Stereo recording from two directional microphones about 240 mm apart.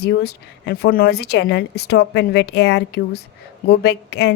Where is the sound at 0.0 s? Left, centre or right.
Left.